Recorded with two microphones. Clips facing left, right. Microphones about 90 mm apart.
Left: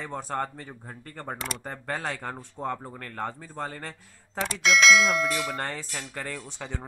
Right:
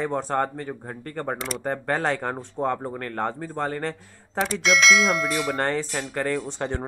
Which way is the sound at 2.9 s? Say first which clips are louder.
Right 6 dB; 55° right (ahead or behind).